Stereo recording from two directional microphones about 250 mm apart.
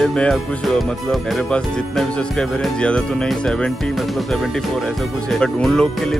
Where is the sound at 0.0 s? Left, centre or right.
Centre.